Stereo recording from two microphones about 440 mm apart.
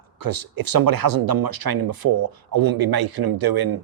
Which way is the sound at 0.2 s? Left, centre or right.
Right.